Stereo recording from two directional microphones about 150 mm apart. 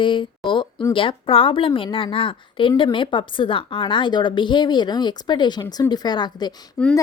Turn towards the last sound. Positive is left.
turn(degrees=5)  # may be behind; listen again after turning